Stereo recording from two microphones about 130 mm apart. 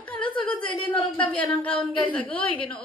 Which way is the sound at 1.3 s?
10° left (ahead or behind).